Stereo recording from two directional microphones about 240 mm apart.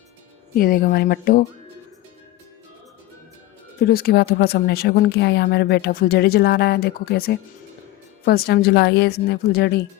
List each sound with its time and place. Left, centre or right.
0.5 s speech: left
3.8 s speech: left